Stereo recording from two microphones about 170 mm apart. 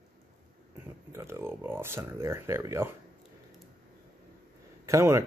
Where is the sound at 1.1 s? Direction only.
15° right (ahead or behind).